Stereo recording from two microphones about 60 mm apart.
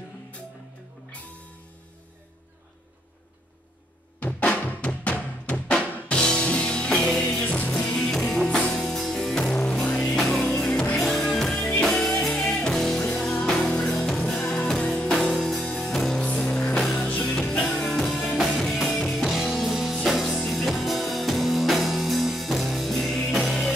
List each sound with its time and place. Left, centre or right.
4.2 s drum: left
7.8 s music: centre
9.5 s music: centre
14.6 s music: left
15.0 s music: centre
16.2 s music: centre
17.6 s music: centre